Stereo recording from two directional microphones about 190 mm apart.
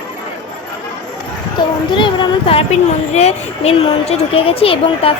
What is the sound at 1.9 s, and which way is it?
A woman's voice, 25° left (ahead or behind).